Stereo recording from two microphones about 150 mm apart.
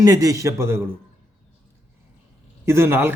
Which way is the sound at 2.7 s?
15° right (ahead or behind).